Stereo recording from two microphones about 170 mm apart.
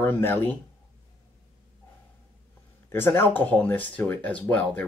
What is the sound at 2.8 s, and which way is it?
Speech, 15° left (ahead or behind).